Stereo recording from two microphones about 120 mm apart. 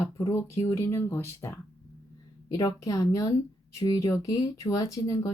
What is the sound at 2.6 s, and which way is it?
Speech, 30° left (ahead or behind).